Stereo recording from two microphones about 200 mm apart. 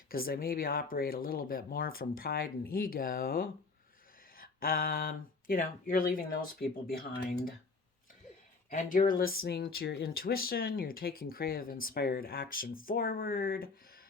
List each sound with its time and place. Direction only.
0.1 s speech: 45° left (ahead or behind)
8.7 s speech: 40° left (ahead or behind)